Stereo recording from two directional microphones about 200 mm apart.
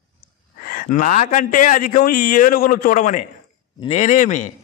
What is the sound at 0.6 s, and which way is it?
A man's voice, 45° left (ahead or behind).